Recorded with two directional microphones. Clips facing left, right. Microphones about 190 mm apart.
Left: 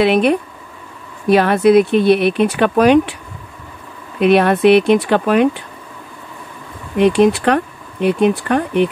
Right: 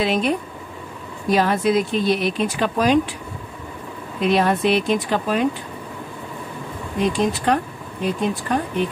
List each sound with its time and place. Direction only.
0.0 s speech: 70° left (ahead or behind)
4.2 s speech: 65° left (ahead or behind)
7.0 s speech: 70° left (ahead or behind)